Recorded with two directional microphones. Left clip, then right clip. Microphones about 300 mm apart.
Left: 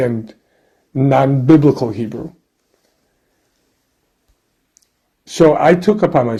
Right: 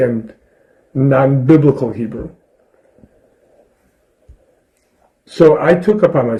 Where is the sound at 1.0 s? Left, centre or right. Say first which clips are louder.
Right 1 dB; left.